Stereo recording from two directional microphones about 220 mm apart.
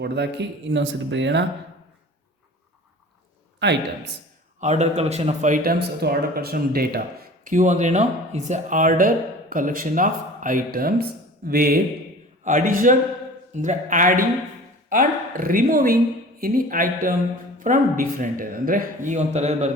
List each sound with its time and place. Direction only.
0.0 s speech: 50° right (ahead or behind)
3.6 s speech: 50° right (ahead or behind)
4.6 s speech: 30° right (ahead or behind)